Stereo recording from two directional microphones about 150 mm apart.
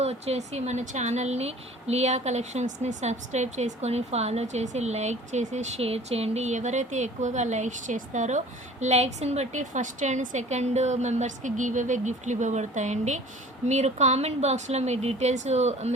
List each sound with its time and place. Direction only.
0.0 s a woman's voice: 45° right (ahead or behind)